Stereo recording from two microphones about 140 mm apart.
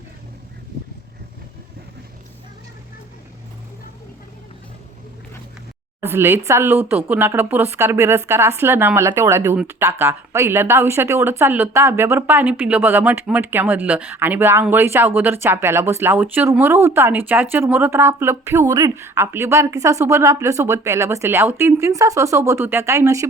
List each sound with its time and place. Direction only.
6.0 s speech: 15° right (ahead or behind)